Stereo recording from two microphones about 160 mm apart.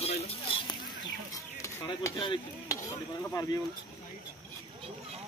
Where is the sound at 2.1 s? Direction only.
25° left (ahead or behind).